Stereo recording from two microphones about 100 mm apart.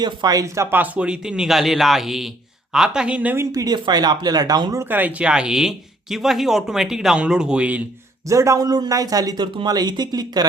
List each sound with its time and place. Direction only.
0.0 s speech: 45° right (ahead or behind)
0.8 s speech: 10° right (ahead or behind)
3.5 s speech: 40° right (ahead or behind)
4.8 s speech: 15° right (ahead or behind)
8.3 s speech: 30° right (ahead or behind)